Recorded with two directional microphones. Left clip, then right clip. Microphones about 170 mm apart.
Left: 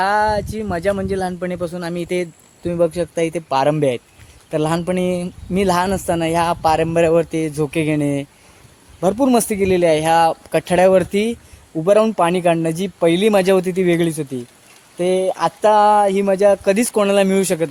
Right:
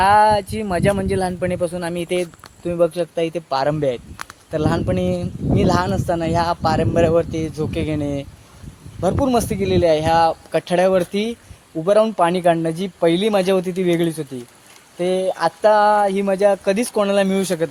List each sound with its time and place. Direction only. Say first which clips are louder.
0.0 s speech: right 3 dB; 5° left (ahead or behind); by 2.3 s 25° left (ahead or behind)
2.6 s speech: even; 40° left (ahead or behind)